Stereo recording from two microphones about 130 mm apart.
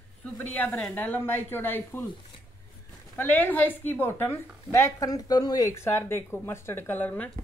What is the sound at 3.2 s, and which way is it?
A woman's voice, 15° left (ahead or behind).